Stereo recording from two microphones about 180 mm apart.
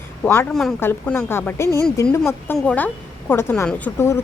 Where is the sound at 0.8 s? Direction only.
10° left (ahead or behind).